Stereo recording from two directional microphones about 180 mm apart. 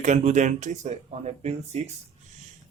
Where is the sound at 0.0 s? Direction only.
40° right (ahead or behind).